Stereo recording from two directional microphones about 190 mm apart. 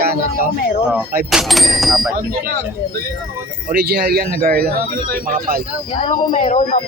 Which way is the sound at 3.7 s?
55° right (ahead or behind).